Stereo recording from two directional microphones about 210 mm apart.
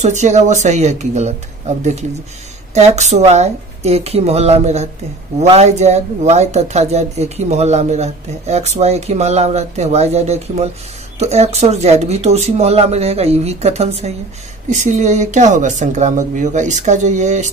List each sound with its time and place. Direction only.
0.0 s speech: 35° right (ahead or behind)